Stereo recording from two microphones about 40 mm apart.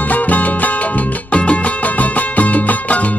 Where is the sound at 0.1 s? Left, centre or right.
Left.